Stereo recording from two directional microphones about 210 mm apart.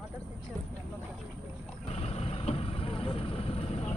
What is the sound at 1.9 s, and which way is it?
Vehicle, 30° left (ahead or behind).